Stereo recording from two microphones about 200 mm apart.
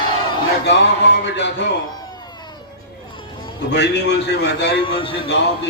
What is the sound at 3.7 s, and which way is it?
A man's voice, 60° left (ahead or behind).